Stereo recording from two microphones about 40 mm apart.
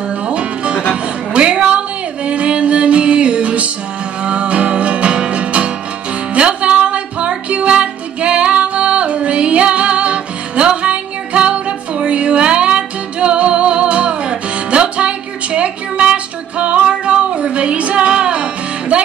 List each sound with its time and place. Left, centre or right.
0.3 s music: right